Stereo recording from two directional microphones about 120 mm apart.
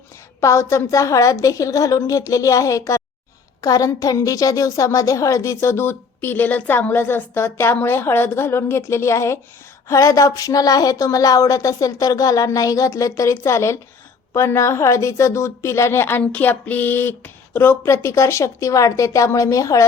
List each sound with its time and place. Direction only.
0.3 s a woman's voice: 25° left (ahead or behind)